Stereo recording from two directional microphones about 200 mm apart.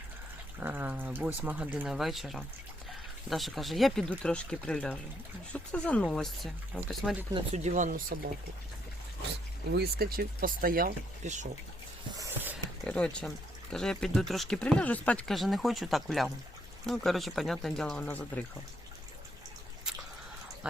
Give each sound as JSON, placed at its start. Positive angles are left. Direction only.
{"t": 0.6, "sound": "speech", "side_deg": -10}
{"t": 7.3, "sound": "speech", "side_deg": -35}
{"t": 9.7, "sound": "speech", "side_deg": -50}
{"t": 12.1, "sound": "a sound", "side_deg": -10}
{"t": 12.8, "sound": "speech", "side_deg": 5}